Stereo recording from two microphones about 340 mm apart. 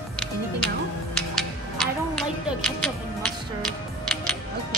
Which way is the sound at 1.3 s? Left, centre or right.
Centre.